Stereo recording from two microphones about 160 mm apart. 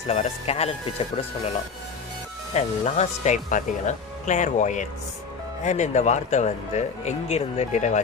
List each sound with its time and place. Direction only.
0.0 s speech: 45° left (ahead or behind)
2.5 s speech: 45° left (ahead or behind)